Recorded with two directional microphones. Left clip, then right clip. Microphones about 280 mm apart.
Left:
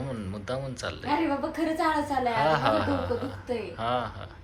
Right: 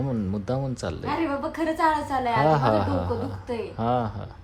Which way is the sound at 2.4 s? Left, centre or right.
Right.